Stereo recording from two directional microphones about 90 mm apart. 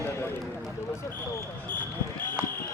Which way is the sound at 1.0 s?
25° left (ahead or behind).